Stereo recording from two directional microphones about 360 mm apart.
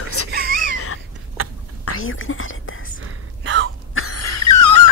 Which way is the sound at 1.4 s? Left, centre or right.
Right.